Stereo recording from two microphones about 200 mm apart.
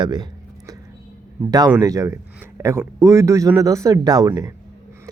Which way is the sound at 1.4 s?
20° right (ahead or behind).